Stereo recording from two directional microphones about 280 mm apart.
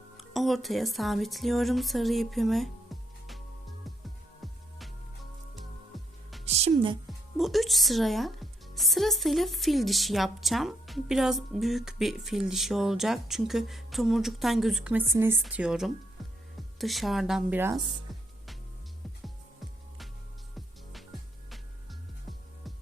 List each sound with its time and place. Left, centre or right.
0.2 s speech: centre
5.9 s music: centre
6.4 s music: right
7.3 s a woman's voice: centre